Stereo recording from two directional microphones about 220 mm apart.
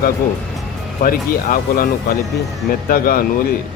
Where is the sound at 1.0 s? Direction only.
40° left (ahead or behind).